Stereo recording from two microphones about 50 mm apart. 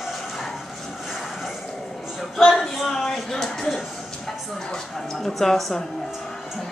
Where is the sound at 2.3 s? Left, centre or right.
Centre.